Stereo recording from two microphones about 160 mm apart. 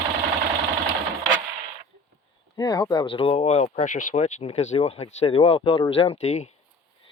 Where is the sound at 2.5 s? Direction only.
25° left (ahead or behind); by 6.5 s 45° left (ahead or behind).